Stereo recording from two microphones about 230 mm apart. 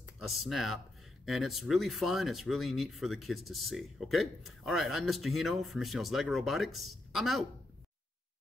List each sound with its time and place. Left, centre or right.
0.3 s speech: centre